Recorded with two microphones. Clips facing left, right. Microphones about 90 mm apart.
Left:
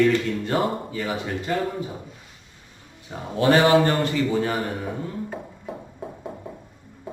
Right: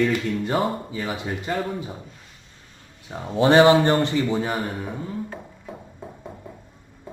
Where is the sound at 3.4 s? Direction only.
20° right (ahead or behind).